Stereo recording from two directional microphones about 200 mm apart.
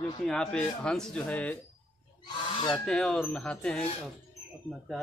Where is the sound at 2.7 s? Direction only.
5° left (ahead or behind).